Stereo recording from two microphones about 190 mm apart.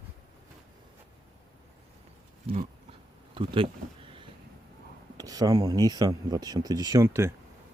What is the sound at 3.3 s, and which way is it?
Speech, 25° right (ahead or behind).